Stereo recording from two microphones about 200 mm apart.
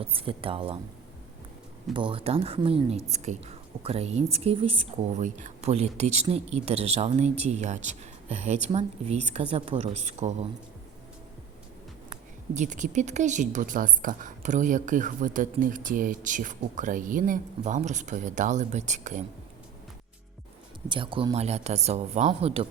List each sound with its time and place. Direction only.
0.0 s speech: 25° right (ahead or behind)
1.9 s speech: 25° right (ahead or behind)
12.5 s speech: 40° right (ahead or behind)
20.8 s speech: 25° right (ahead or behind)